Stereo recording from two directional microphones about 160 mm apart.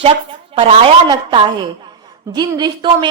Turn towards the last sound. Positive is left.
turn(degrees=-25)  # may be behind; listen again after turning